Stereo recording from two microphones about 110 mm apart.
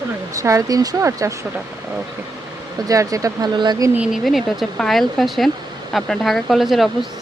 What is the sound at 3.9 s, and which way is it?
Speech, 10° right (ahead or behind).